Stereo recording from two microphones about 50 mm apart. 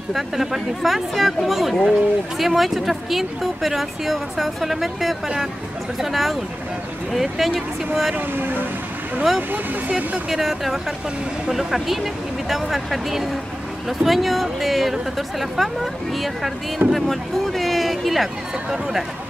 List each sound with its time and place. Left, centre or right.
0.1 s speech: centre
8.4 s speech: right
9.5 s speech: right
10.3 s speech: centre